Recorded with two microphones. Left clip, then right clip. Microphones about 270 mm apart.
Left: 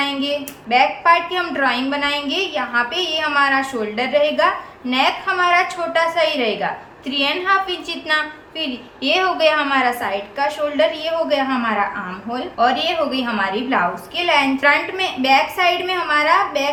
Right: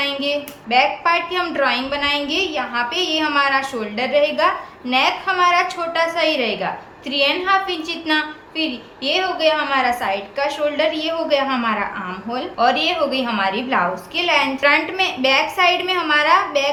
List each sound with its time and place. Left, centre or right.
0.0 s a woman's voice: centre